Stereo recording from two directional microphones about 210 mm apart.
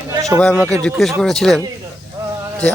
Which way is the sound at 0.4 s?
5° left (ahead or behind).